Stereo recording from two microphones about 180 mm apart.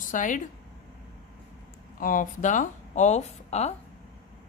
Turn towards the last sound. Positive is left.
turn(degrees=35)  # may be behind; listen again after turning